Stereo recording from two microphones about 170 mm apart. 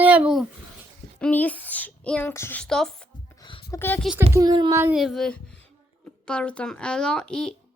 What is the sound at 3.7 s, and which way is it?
Speech, 10° left (ahead or behind).